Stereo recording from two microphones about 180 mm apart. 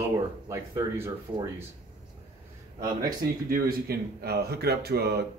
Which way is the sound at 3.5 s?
60° right (ahead or behind).